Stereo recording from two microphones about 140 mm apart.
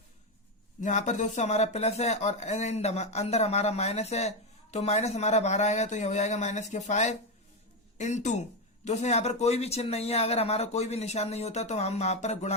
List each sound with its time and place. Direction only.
0.8 s speech: 60° left (ahead or behind)